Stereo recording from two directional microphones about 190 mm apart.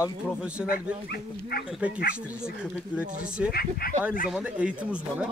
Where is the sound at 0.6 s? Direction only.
50° left (ahead or behind).